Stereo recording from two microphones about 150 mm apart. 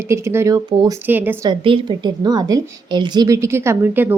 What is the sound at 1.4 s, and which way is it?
A woman's voice, 30° right (ahead or behind).